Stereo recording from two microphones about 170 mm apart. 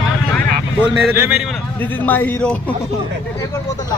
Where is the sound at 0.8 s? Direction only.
10° right (ahead or behind).